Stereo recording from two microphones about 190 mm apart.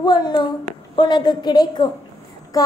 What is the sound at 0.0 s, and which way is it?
Speech, 20° left (ahead or behind).